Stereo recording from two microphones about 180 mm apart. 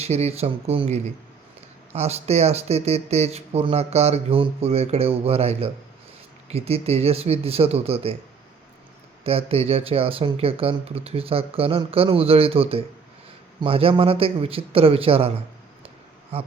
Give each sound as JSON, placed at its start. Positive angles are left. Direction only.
{"t": 0.0, "sound": "speech", "side_deg": -35}
{"t": 9.2, "sound": "speech", "side_deg": -30}